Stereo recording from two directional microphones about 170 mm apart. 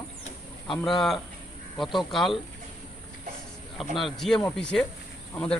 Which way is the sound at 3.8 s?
Centre (ahead or behind).